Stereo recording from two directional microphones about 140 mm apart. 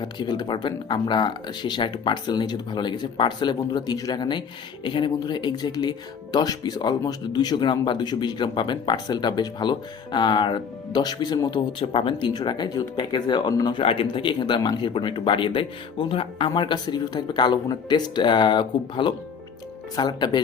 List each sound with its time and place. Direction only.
0.0 s speech: 30° left (ahead or behind)